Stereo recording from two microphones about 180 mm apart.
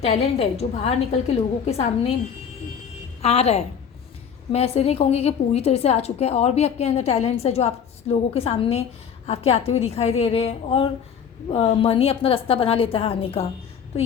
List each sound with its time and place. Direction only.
0.0 s a woman's voice: 35° left (ahead or behind)
3.2 s a woman's voice: 35° left (ahead or behind)